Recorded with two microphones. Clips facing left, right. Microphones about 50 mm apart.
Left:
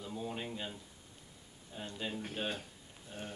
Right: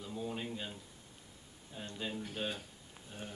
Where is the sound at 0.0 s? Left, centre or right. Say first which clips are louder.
Even; centre.